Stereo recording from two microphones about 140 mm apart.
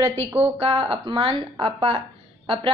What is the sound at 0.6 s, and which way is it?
A woman's voice, 45° right (ahead or behind).